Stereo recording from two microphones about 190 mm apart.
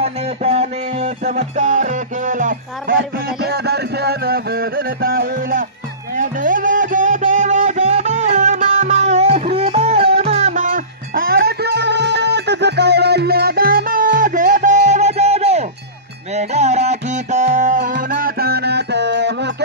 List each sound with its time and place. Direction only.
0.0 s music: 35° right (ahead or behind)
3.0 s music: 60° right (ahead or behind); by 10.7 s 40° right (ahead or behind)
11.1 s music: 50° right (ahead or behind)
18.1 s music: 50° right (ahead or behind)